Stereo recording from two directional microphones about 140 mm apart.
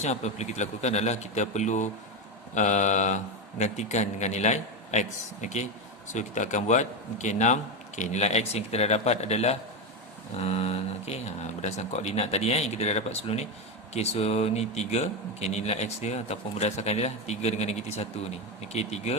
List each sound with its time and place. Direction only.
0.0 s a man's voice: 55° left (ahead or behind)